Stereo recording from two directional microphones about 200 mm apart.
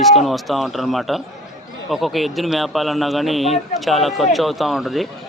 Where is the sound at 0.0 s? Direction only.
Centre (ahead or behind).